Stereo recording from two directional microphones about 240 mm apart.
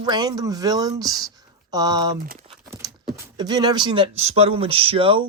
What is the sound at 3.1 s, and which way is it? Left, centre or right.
Speech, centre.